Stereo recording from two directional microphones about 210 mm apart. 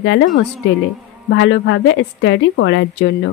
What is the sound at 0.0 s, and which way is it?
Speech, 60° left (ahead or behind).